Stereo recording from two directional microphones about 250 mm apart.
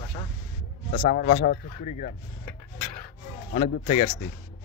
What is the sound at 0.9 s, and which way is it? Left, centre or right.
Speech, left.